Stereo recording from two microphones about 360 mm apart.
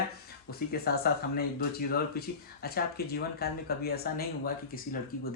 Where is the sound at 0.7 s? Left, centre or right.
Left.